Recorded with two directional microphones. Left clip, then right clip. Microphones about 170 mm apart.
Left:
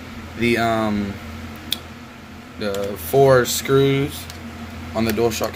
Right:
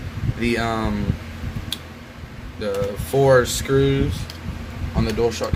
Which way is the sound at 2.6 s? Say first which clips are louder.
Even; 15° left (ahead or behind).